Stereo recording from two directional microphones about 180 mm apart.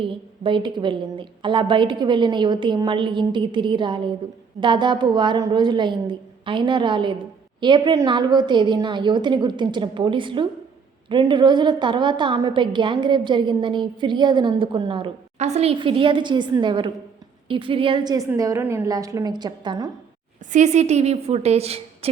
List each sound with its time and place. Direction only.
0.0 s a woman's voice: 30° right (ahead or behind)
20.5 s a woman's voice: 40° right (ahead or behind)